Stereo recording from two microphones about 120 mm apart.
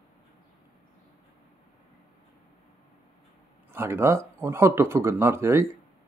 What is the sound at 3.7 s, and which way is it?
Speech, 20° right (ahead or behind).